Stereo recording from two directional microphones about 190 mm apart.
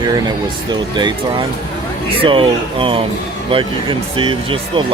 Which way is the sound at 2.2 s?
25° right (ahead or behind).